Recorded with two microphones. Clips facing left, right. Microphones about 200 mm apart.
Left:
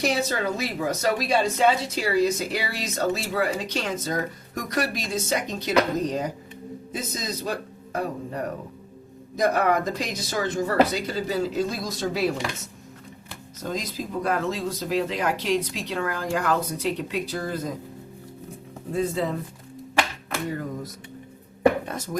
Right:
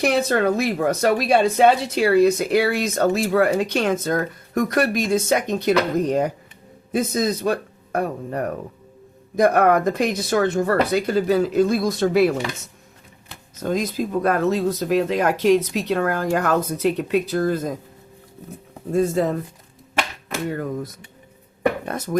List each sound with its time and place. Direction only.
0.0 s speech: 55° right (ahead or behind)
13.6 s speech: 55° right (ahead or behind)
18.9 s speech: 45° right (ahead or behind)
21.8 s speech: 60° right (ahead or behind)